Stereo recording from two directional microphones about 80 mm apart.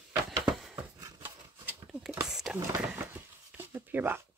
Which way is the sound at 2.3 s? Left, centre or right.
Centre.